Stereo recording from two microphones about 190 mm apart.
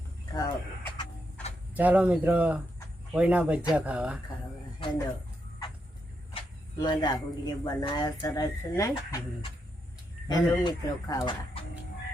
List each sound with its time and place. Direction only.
0.3 s vehicle: 15° left (ahead or behind)
1.7 s speech: 10° right (ahead or behind)
6.3 s speech: 20° left (ahead or behind)
10.2 s speech: 20° left (ahead or behind)